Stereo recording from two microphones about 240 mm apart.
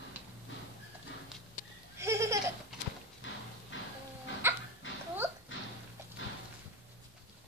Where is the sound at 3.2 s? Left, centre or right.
Left.